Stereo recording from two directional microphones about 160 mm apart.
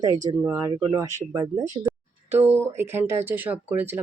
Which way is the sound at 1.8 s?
15° right (ahead or behind).